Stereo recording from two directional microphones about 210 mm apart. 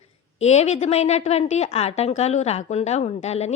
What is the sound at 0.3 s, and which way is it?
A woman's voice, 30° left (ahead or behind).